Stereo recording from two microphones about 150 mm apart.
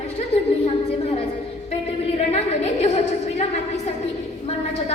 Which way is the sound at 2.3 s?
45° left (ahead or behind).